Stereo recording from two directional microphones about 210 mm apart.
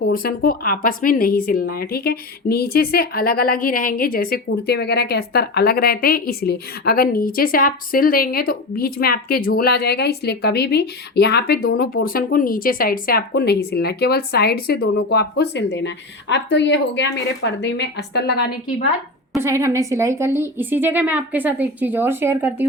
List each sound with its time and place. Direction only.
0.1 s a woman's voice: 45° left (ahead or behind)
19.4 s a woman's voice: 15° right (ahead or behind)